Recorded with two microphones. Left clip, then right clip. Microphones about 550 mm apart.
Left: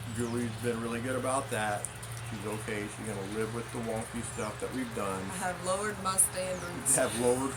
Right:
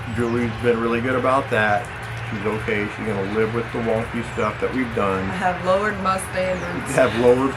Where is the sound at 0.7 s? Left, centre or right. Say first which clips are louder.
Right 15 dB; left.